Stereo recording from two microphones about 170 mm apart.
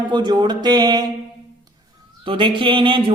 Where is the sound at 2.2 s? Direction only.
30° right (ahead or behind).